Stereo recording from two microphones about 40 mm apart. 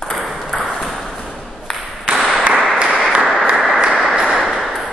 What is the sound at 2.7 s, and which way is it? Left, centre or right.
Applause, right.